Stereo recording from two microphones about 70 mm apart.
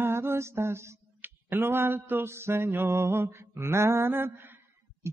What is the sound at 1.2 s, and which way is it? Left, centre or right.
A man's voice, right.